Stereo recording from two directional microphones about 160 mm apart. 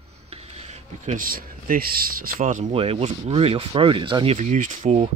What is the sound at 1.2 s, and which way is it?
Speech, 60° right (ahead or behind).